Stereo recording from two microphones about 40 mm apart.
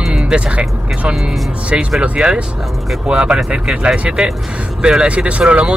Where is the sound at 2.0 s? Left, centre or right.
Right.